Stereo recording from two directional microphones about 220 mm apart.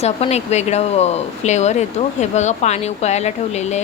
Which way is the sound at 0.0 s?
30° left (ahead or behind).